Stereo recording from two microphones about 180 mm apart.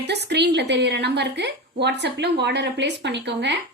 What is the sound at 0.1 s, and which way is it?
Speech, 70° right (ahead or behind).